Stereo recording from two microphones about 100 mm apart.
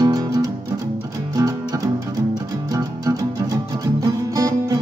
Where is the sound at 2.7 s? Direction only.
35° right (ahead or behind).